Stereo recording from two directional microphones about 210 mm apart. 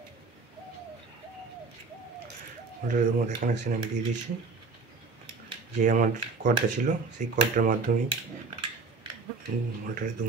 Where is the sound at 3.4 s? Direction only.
45° right (ahead or behind).